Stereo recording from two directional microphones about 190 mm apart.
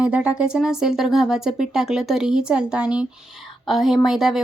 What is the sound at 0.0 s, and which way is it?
Speech, 5° right (ahead or behind).